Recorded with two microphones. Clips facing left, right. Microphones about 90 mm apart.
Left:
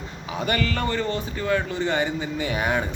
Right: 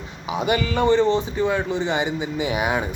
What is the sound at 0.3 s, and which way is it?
A man's voice, 15° right (ahead or behind).